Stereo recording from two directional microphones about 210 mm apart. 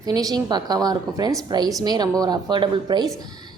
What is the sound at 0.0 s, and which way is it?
A woman's voice, 15° right (ahead or behind).